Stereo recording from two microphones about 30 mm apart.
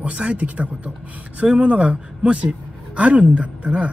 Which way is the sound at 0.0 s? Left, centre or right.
Right.